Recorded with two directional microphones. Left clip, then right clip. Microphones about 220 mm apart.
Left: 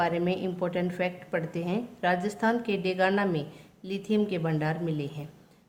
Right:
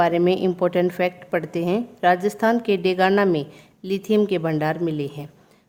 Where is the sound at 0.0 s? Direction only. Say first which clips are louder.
Right 9 dB; 45° right (ahead or behind).